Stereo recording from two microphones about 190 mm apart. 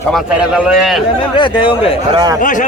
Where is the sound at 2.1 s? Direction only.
20° right (ahead or behind).